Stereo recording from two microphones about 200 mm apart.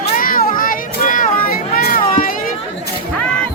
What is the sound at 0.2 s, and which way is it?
Children playing, 45° left (ahead or behind).